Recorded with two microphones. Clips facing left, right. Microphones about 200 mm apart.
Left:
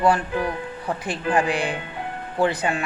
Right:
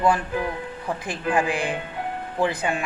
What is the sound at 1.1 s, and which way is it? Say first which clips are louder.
Speech: left 2 dB; 35° left (ahead or behind).